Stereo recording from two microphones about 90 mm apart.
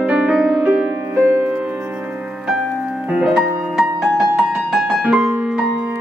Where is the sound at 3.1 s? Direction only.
5° right (ahead or behind).